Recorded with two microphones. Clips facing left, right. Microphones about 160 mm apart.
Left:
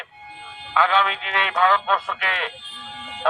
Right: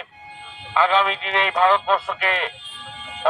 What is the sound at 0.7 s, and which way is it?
A man's voice, 10° right (ahead or behind).